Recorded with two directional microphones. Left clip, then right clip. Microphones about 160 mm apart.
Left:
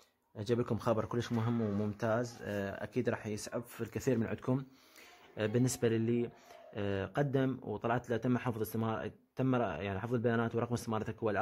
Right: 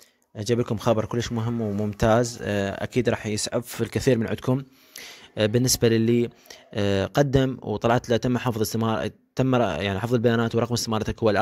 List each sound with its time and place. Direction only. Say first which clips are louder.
0.4 s speech: right 9 dB; 30° right (ahead or behind)
2.0 s speech: right 16 dB; 45° right (ahead or behind)